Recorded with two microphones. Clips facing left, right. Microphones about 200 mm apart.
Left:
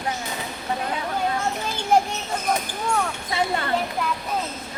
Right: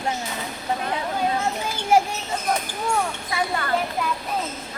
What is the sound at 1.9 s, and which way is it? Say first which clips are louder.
Children playing: right 1 dB; 10° right (ahead or behind).